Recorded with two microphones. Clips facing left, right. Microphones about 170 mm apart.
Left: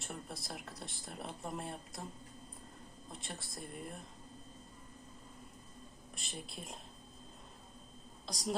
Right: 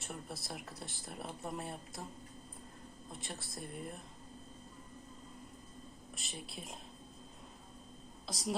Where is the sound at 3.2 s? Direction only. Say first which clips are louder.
Right 1 dB; centre (ahead or behind).